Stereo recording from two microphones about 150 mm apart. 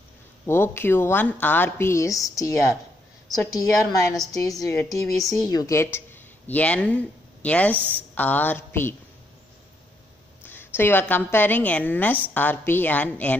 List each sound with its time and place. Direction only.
0.5 s a woman's voice: 15° left (ahead or behind)
10.4 s a woman's voice: 15° left (ahead or behind)